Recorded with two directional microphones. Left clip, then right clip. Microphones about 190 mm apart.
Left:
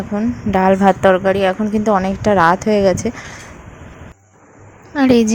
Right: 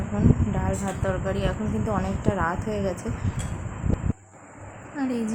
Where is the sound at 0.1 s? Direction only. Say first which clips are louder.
Left 6 dB; 30° left (ahead or behind).